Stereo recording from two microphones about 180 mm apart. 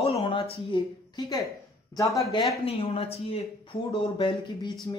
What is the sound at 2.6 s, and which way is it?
A woman's voice, 30° left (ahead or behind).